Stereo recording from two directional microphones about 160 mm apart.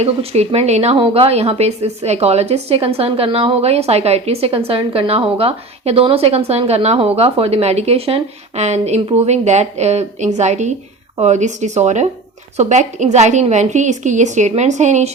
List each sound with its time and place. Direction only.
0.0 s speech: 40° right (ahead or behind)